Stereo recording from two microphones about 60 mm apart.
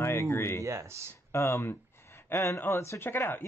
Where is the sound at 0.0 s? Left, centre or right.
Left.